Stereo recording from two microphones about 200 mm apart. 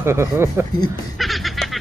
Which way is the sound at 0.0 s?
15° right (ahead or behind).